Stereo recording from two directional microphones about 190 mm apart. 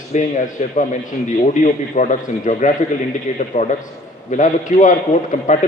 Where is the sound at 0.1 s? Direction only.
40° left (ahead or behind).